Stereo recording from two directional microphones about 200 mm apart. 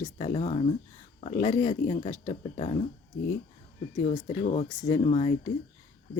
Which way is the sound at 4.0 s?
40° left (ahead or behind).